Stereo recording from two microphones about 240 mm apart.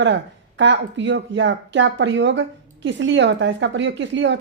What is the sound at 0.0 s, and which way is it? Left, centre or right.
Speech, right.